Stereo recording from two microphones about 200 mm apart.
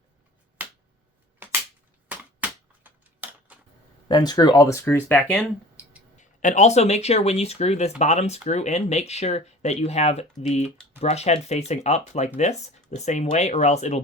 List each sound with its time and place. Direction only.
0.6 s finger snapping: 10° right (ahead or behind)
1.4 s a sound: 10° right (ahead or behind)
4.1 s speech: 20° left (ahead or behind)
6.1 s speech: 40° left (ahead or behind)